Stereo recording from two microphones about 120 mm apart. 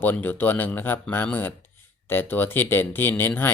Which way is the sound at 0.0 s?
15° left (ahead or behind).